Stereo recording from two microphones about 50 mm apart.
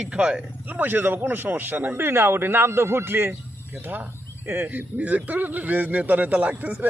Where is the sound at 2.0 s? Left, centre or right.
Right.